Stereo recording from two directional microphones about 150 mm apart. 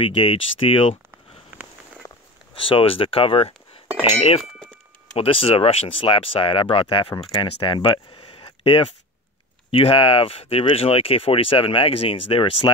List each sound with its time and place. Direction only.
0.0 s speech: 35° left (ahead or behind)
5.1 s speech: 40° left (ahead or behind)